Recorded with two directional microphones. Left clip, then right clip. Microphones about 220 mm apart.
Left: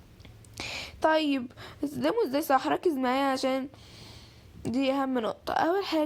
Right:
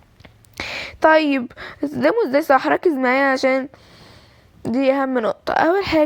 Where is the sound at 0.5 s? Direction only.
25° right (ahead or behind).